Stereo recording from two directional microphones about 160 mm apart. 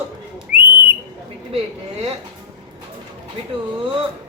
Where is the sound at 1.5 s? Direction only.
35° right (ahead or behind).